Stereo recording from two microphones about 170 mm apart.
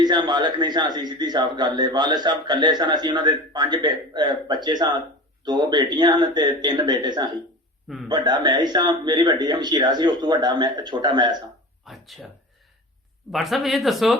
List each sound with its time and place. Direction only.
0.0 s speech: 25° right (ahead or behind)
11.9 s speech: centre (ahead or behind)
13.3 s speech: centre (ahead or behind)